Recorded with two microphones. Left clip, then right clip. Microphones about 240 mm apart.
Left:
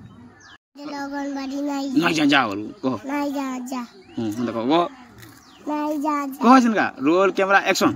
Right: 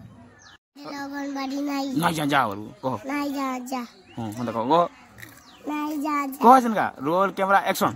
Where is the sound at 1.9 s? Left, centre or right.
Right.